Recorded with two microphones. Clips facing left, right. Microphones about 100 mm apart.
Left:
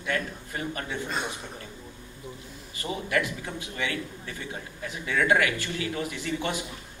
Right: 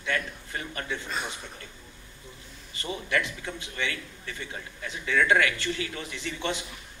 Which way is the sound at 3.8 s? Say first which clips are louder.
Left 4 dB; 30° left (ahead or behind).